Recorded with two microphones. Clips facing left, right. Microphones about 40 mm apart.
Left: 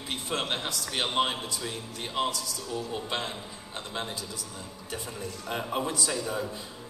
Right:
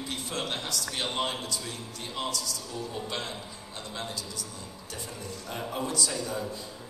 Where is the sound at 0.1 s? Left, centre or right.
Left.